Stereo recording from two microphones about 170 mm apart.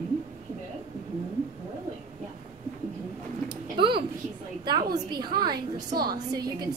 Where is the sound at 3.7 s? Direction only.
30° right (ahead or behind).